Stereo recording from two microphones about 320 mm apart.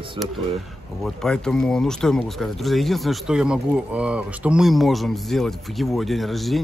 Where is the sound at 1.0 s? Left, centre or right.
Centre.